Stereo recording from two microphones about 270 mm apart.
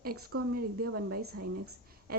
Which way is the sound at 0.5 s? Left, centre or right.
Right.